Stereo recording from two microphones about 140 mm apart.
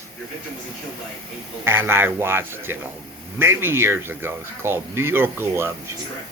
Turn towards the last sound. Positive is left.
turn(degrees=-15)  # may be behind; listen again after turning